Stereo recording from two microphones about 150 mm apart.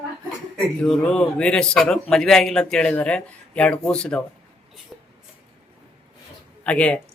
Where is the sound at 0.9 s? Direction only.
5° left (ahead or behind).